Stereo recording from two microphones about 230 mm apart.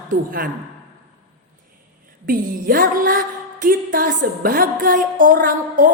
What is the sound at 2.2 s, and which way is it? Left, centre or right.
A woman's voice, right.